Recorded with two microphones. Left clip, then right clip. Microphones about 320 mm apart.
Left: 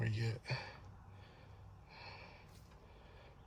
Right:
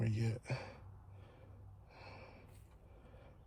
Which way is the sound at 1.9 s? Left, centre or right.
Centre.